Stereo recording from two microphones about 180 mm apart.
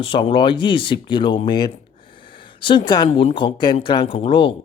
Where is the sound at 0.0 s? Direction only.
25° left (ahead or behind).